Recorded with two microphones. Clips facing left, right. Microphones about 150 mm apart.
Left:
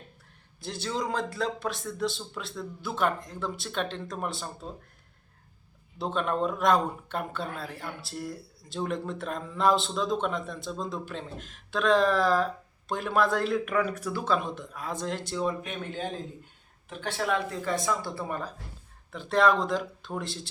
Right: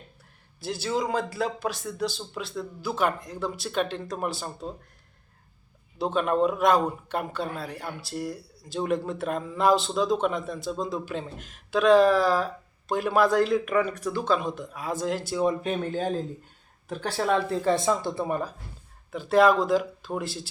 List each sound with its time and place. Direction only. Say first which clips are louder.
0.6 s speech: right 4 dB; 5° right (ahead or behind)
6.0 s speech: right 5 dB; centre (ahead or behind)
15.6 s a man's voice: right 7 dB; 35° right (ahead or behind); by 18.5 s 15° right (ahead or behind)
19.1 s speech: right 4 dB; 5° right (ahead or behind)